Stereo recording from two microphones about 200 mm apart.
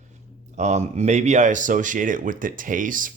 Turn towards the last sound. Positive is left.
turn(degrees=-40)  # may be behind; listen again after turning